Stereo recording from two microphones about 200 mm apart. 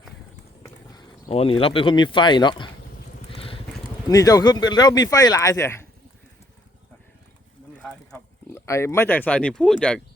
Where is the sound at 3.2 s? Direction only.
25° left (ahead or behind).